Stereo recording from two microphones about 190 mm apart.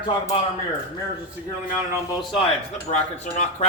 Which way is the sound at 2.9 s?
40° left (ahead or behind).